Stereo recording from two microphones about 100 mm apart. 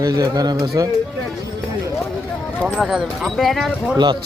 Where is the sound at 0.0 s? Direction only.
40° right (ahead or behind).